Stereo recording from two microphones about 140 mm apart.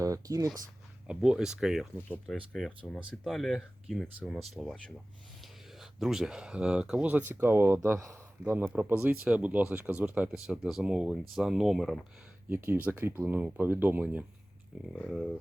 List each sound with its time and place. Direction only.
0.0 s speech: 25° right (ahead or behind)
1.0 s speech: 5° right (ahead or behind)
12.5 s speech: 15° right (ahead or behind)
15.0 s speech: centre (ahead or behind)